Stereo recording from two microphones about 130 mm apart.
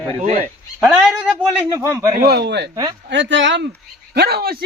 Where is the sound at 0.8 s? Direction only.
Centre (ahead or behind).